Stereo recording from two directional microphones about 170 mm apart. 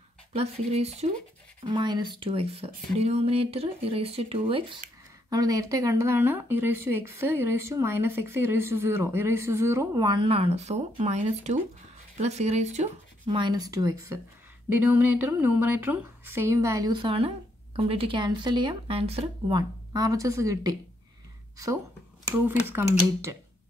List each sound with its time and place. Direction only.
0.3 s speech: 40° right (ahead or behind)
1.7 s speech: 25° right (ahead or behind)
5.3 s speech: 20° right (ahead or behind); by 12.9 s 40° right (ahead or behind)
13.2 s speech: 25° right (ahead or behind)
22.5 s speech: 15° right (ahead or behind)